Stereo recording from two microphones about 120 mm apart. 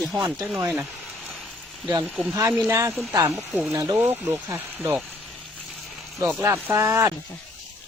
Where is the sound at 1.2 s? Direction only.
Centre (ahead or behind).